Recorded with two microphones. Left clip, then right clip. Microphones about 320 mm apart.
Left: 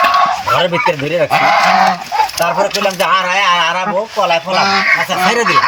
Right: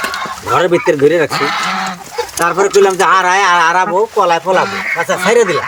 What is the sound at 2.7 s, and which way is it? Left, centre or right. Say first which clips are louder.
Speech: right 4 dB; centre.